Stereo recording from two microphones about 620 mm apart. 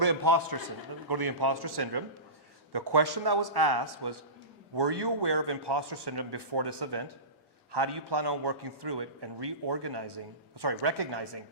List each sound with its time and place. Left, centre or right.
0.0 s a man's voice: right